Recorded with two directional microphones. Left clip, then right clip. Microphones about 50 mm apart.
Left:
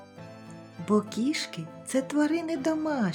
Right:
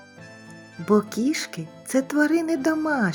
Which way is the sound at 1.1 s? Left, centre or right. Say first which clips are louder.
Right 4 dB; right.